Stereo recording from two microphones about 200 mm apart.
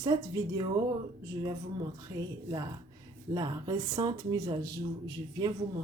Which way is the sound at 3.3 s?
20° right (ahead or behind).